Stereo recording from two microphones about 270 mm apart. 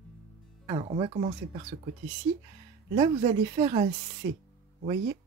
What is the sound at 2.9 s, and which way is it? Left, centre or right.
Speech, centre.